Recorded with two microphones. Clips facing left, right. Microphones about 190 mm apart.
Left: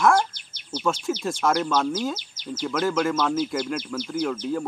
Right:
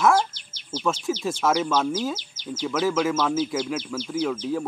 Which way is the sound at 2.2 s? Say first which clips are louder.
Even; 15° left (ahead or behind).